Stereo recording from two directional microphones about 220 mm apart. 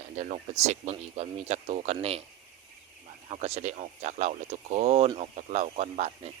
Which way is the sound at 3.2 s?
30° right (ahead or behind).